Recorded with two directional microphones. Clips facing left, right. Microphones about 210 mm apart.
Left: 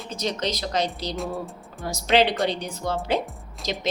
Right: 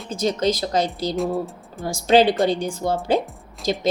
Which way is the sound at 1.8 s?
30° right (ahead or behind).